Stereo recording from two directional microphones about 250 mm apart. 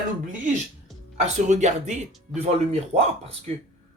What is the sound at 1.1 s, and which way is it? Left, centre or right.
Speech, right.